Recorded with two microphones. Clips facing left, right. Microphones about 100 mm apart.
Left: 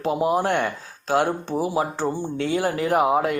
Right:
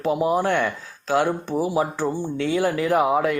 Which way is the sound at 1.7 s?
30° left (ahead or behind).